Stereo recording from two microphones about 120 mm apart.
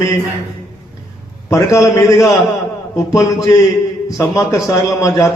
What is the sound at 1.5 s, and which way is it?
A man's voice, 25° left (ahead or behind).